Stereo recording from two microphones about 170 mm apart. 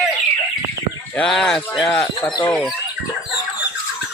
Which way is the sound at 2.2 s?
25° left (ahead or behind).